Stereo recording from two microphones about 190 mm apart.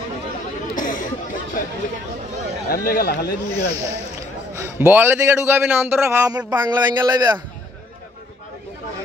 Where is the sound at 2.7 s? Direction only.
50° left (ahead or behind).